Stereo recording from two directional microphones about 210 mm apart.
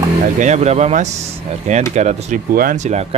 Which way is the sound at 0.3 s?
35° right (ahead or behind).